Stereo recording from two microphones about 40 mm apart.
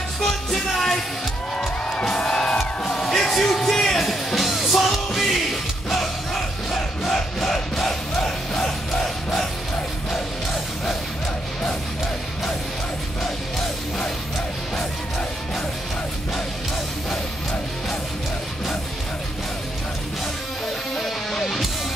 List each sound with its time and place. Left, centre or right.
0.5 s music: centre
2.5 s music: centre
21.3 s music: centre